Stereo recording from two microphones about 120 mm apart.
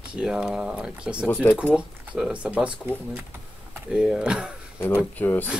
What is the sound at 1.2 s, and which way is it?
Speech, 15° left (ahead or behind).